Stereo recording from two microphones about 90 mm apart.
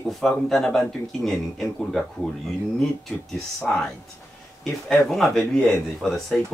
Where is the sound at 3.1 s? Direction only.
5° left (ahead or behind).